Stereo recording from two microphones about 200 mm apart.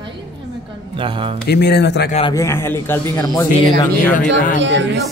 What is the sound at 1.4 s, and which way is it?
Speech, 55° left (ahead or behind).